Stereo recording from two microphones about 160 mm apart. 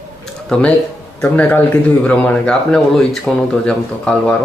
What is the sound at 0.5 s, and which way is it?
A man's voice, 5° left (ahead or behind).